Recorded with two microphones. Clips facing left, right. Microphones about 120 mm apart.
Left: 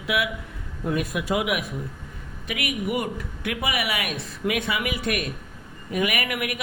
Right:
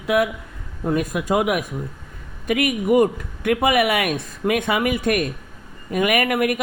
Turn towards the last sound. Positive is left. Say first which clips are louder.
# right 8 dB
turn(degrees=-45)  # may be behind; listen again after turning